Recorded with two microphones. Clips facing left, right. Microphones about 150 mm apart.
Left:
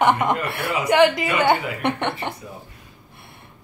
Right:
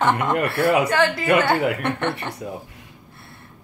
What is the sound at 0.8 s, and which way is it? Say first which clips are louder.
A woman's voice: left 3 dB; 15° left (ahead or behind).